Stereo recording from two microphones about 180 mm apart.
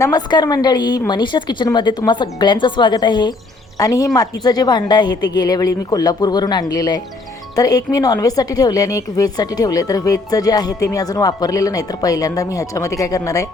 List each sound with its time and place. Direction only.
0.0 s a woman's voice: 25° left (ahead or behind)